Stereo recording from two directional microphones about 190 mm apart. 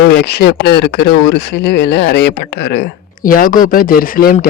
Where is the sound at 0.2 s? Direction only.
60° left (ahead or behind).